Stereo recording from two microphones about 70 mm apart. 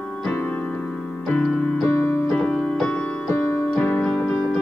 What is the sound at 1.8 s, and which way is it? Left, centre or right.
Electric piano, left.